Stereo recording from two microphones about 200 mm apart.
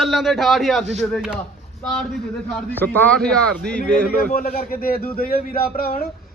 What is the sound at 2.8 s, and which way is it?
A man's voice, 10° left (ahead or behind).